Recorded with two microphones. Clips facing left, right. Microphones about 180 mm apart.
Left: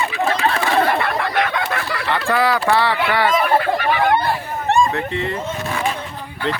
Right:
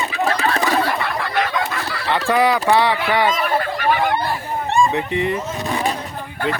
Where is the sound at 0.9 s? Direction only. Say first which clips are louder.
Left 2 dB; 60° left (ahead or behind).